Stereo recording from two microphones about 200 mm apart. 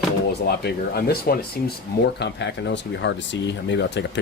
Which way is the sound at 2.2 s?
60° left (ahead or behind).